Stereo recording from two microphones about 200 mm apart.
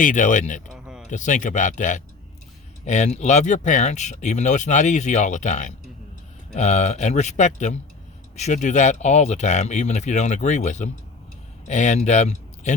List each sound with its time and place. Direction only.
0.0 s speech: 40° left (ahead or behind)